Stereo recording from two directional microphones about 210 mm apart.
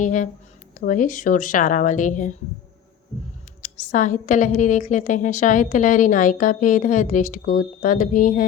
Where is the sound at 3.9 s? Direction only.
40° left (ahead or behind).